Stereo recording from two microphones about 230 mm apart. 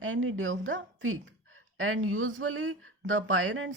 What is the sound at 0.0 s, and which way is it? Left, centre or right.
A woman's voice, right.